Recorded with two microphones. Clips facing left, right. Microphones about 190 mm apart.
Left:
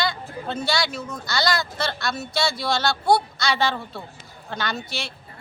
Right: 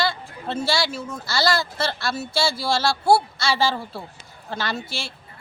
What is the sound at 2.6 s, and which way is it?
Speech, 30° right (ahead or behind).